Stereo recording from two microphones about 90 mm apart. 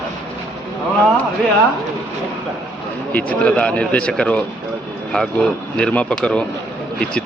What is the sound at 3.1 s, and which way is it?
A man's voice, 15° left (ahead or behind).